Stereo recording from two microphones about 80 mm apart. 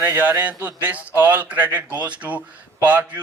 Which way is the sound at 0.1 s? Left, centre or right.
Right.